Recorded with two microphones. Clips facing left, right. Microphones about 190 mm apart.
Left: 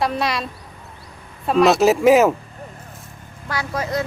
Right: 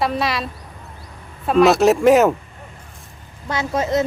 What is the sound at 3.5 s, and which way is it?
Speech, 25° right (ahead or behind).